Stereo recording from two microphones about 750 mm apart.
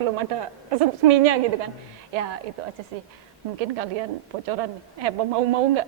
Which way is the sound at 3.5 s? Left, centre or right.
Right.